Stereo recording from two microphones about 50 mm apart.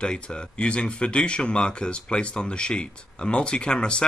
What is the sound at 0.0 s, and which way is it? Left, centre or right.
Speech, centre.